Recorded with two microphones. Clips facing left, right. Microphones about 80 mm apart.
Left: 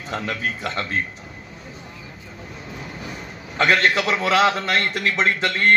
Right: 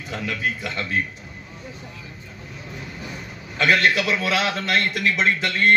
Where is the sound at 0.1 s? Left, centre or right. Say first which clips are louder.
Left 1 dB; left.